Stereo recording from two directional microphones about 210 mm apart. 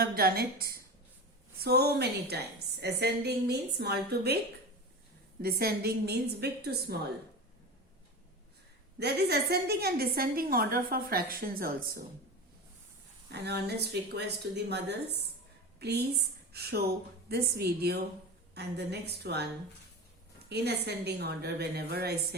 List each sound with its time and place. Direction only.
0.0 s a woman's voice: 45° right (ahead or behind)
5.4 s a woman's voice: 45° right (ahead or behind)
9.0 s a woman's voice: 50° right (ahead or behind)
13.3 s a woman's voice: 50° right (ahead or behind)
16.5 s a woman's voice: 50° right (ahead or behind)
20.5 s a woman's voice: 50° right (ahead or behind)